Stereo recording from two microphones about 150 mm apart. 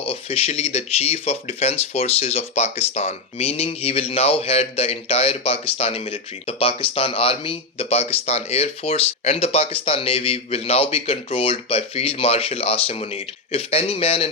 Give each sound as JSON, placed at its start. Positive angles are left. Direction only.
{"t": 0.1, "sound": "speech", "side_deg": 40}